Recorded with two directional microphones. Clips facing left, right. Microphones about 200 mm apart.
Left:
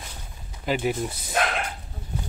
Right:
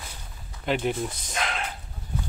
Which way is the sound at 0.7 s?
5° left (ahead or behind).